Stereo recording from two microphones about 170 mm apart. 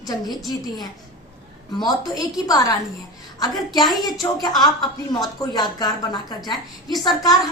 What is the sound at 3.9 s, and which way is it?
Speech, centre (ahead or behind).